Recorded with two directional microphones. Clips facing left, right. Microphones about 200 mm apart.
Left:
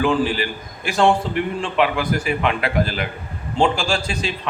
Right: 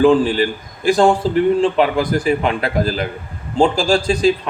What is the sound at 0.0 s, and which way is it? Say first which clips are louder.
A man's voice: right 7 dB; 35° right (ahead or behind).